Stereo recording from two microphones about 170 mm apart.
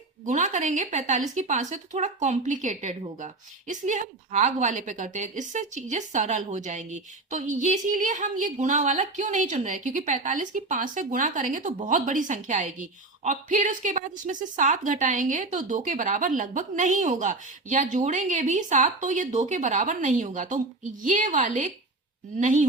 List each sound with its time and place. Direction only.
0.3 s speech: 45° right (ahead or behind)